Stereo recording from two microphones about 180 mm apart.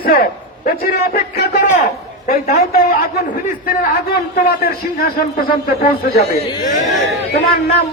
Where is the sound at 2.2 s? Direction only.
50° left (ahead or behind).